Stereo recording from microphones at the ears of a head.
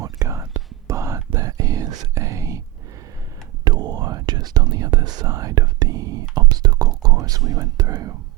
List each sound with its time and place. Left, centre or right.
0.0 s whispering: right
3.6 s whispering: right